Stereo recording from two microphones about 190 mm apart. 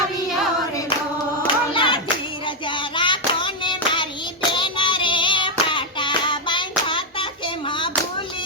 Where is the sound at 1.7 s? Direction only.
25° left (ahead or behind).